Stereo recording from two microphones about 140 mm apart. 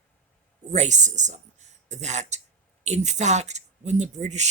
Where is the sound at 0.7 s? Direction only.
55° right (ahead or behind).